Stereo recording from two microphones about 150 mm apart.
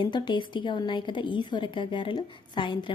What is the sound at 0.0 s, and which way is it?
A woman's voice, 30° left (ahead or behind).